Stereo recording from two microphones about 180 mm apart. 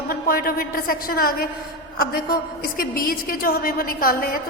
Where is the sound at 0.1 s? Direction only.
55° left (ahead or behind).